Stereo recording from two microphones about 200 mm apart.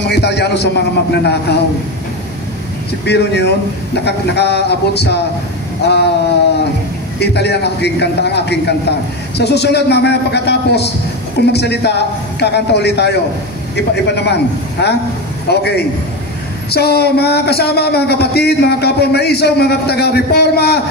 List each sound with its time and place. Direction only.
0.0 s a man's voice: 55° left (ahead or behind)
3.1 s a man's voice: 55° left (ahead or behind)